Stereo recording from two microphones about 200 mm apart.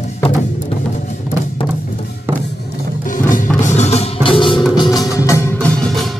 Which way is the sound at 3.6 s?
35° left (ahead or behind).